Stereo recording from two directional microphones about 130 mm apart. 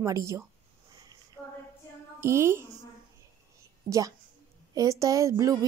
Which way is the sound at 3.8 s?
90° right.